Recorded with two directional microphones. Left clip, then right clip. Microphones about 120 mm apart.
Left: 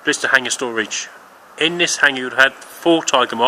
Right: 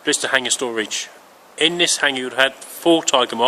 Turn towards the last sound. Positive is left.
turn(degrees=-15)  # may be behind; listen again after turning